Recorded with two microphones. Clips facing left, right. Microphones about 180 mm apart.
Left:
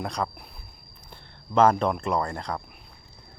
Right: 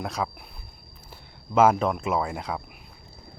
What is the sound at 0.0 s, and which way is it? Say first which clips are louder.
Speech: even; centre (ahead or behind).